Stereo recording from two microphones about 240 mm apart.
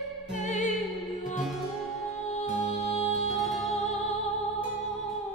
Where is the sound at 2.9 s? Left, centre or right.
Left.